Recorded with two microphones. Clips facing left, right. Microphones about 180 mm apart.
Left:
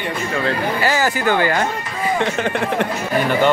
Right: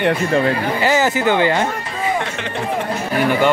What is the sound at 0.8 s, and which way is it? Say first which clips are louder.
Speech: right 2 dB; 20° right (ahead or behind).